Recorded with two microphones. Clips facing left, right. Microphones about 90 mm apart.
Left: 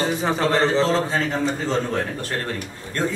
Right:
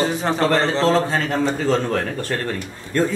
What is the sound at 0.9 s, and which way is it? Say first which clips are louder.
Speech: right 3 dB; 65° right (ahead or behind).